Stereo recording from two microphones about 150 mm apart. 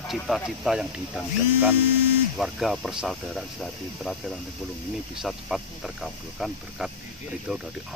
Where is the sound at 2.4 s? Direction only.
Centre (ahead or behind).